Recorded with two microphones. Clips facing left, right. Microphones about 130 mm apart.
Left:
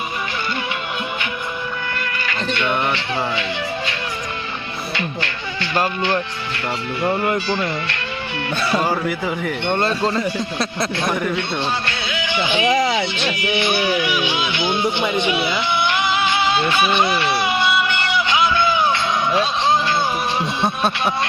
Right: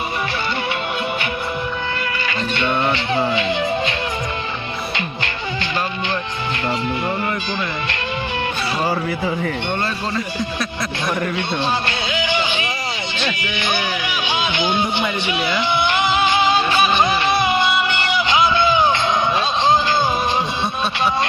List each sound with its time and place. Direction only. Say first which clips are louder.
2.2 s music: even; 25° right (ahead or behind)
9.7 s speech: left 4 dB; 25° left (ahead or behind)
14.3 s speech: right 1 dB; 25° right (ahead or behind)
15.7 s music: right 3 dB; 20° right (ahead or behind)
16.5 s speech: right 1 dB; 40° right (ahead or behind)
17.4 s music: right 1 dB; 20° right (ahead or behind)